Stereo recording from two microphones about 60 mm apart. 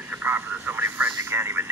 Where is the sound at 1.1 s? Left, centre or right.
Right.